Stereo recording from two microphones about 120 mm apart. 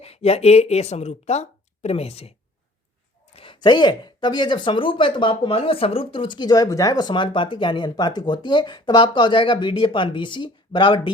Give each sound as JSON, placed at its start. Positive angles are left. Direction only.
{"t": 0.0, "sound": "speech", "side_deg": 60}
{"t": 3.3, "sound": "speech", "side_deg": 45}